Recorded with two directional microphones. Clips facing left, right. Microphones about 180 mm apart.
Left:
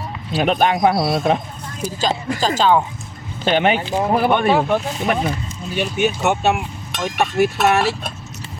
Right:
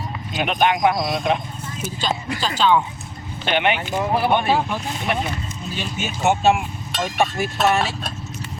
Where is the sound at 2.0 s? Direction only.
45° left (ahead or behind).